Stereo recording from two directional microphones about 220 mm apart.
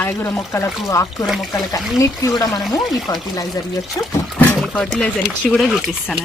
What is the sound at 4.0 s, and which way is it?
Speech, 15° left (ahead or behind).